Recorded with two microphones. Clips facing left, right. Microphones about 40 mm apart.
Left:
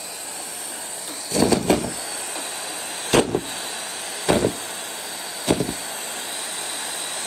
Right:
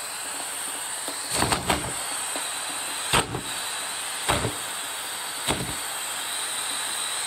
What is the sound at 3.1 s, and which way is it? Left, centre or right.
Vehicle, right.